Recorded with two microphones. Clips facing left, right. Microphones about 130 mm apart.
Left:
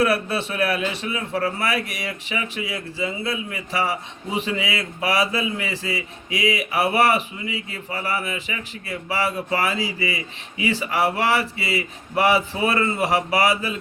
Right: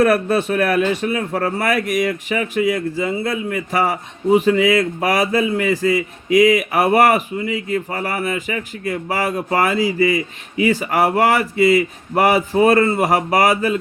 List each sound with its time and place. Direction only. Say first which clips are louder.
0.0 s a man's voice: right 6 dB; 45° right (ahead or behind)